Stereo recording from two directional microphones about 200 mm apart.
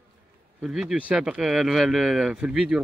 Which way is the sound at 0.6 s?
Centre (ahead or behind).